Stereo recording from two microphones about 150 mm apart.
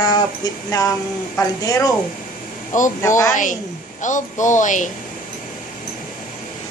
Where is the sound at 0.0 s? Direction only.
25° left (ahead or behind).